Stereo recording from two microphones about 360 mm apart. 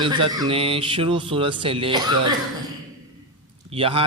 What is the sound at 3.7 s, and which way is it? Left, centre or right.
Speech, centre.